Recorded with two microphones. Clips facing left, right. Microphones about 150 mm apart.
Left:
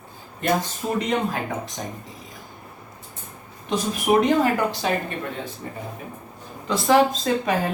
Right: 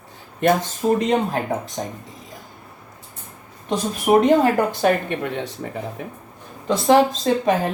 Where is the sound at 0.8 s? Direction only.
50° right (ahead or behind).